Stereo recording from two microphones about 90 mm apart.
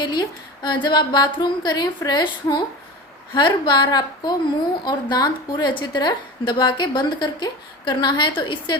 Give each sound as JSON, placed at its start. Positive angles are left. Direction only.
{"t": 0.0, "sound": "a woman's voice", "side_deg": 55}